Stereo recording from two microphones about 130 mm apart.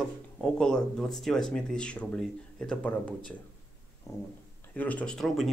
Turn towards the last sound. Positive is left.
turn(degrees=0)  # may be behind; listen again after turning